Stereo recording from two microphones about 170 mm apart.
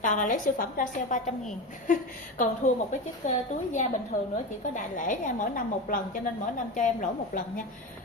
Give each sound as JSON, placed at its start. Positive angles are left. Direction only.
{"t": 0.0, "sound": "a woman's voice", "side_deg": 50}